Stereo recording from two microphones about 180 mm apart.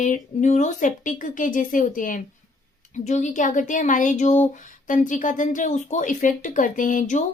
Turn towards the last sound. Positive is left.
turn(degrees=45)  # may be behind; listen again after turning